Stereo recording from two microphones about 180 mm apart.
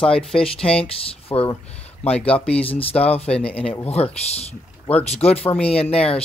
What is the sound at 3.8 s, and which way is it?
Speech, 35° left (ahead or behind).